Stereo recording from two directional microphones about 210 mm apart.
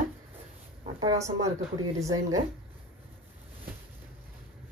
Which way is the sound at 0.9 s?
15° right (ahead or behind).